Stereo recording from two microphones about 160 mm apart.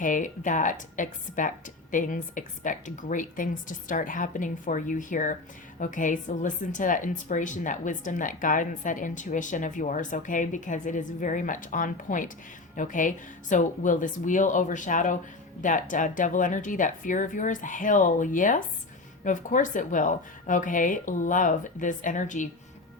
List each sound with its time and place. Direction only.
0.0 s speech: 55° left (ahead or behind)